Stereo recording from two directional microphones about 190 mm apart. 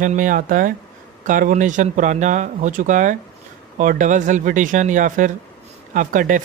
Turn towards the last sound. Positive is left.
turn(degrees=-45)  # may be behind; listen again after turning